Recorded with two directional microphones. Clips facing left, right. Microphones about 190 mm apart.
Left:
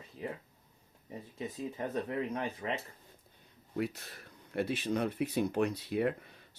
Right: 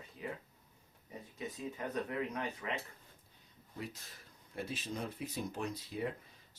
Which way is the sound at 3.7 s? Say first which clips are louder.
Left 10 dB; 65° left (ahead or behind).